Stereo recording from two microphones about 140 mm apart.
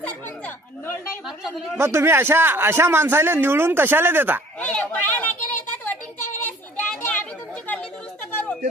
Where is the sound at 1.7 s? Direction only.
20° right (ahead or behind).